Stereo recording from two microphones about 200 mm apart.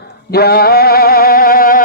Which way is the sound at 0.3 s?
50° left (ahead or behind).